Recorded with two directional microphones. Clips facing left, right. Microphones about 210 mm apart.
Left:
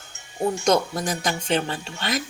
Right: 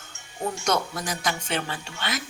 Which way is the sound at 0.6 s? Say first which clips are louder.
Left 5 dB; 35° left (ahead or behind).